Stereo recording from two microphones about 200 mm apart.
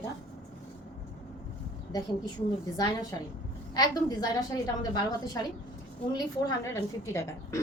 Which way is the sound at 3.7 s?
20° left (ahead or behind).